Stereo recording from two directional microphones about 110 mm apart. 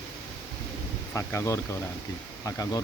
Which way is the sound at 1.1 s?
25° left (ahead or behind).